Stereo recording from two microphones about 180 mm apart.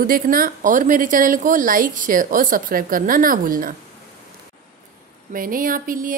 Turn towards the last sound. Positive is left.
turn(degrees=-50)  # may be behind; listen again after turning